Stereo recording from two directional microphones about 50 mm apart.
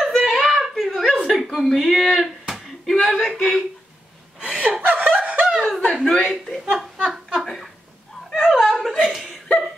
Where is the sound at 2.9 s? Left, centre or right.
Centre.